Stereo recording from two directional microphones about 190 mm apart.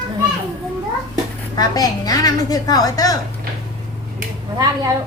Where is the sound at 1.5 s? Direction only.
20° left (ahead or behind).